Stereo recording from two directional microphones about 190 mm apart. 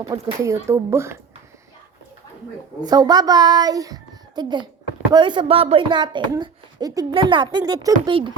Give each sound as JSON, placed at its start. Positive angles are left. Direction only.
{"t": 0.1, "sound": "speech", "side_deg": -15}
{"t": 2.8, "sound": "speech", "side_deg": -20}